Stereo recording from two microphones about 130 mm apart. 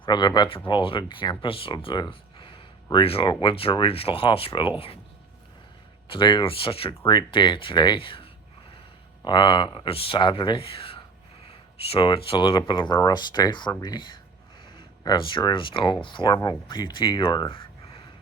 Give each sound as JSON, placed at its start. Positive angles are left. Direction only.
{"t": 0.0, "sound": "speech", "side_deg": 35}
{"t": 6.1, "sound": "speech", "side_deg": 40}